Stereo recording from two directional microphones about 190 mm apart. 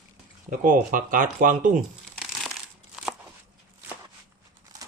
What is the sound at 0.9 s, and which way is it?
Speech, 45° right (ahead or behind).